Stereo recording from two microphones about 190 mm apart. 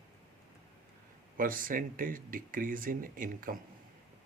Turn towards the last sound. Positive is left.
turn(degrees=-45)  # may be behind; listen again after turning